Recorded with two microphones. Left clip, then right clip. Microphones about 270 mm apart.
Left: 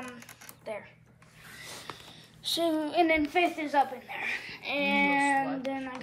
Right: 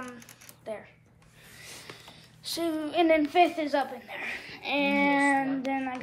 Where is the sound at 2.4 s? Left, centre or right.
Centre.